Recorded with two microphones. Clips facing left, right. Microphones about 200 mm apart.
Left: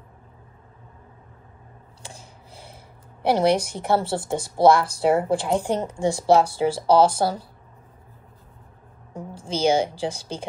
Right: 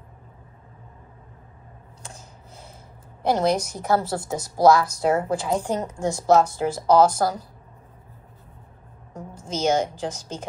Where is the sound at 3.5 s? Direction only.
30° left (ahead or behind).